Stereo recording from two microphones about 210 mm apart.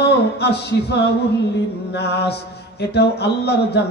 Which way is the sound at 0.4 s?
55° left (ahead or behind).